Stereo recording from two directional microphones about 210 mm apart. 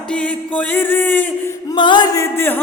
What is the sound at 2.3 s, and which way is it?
Music, 10° left (ahead or behind).